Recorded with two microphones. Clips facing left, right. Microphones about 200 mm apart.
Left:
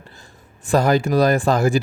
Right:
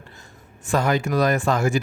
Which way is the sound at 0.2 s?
35° left (ahead or behind).